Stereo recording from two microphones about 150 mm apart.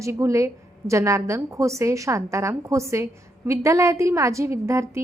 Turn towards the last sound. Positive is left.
turn(degrees=-20)  # may be behind; listen again after turning